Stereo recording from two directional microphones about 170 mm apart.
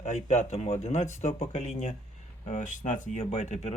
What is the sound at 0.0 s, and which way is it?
Speech, 40° left (ahead or behind).